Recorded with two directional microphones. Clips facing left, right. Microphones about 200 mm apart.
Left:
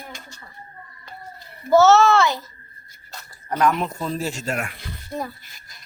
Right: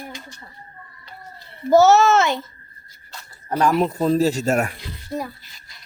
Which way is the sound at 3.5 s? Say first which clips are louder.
Right 3 dB; 30° right (ahead or behind).